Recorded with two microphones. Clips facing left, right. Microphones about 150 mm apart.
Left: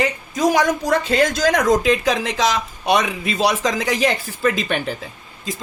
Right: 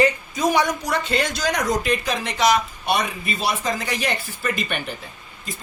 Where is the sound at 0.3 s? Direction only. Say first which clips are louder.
Left 5 dB; 90° left.